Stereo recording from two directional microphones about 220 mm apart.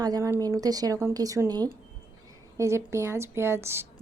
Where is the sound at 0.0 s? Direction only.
15° right (ahead or behind).